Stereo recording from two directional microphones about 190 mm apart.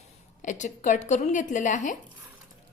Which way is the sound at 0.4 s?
40° left (ahead or behind).